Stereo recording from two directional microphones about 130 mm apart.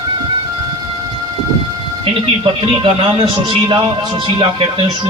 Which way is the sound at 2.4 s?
40° right (ahead or behind).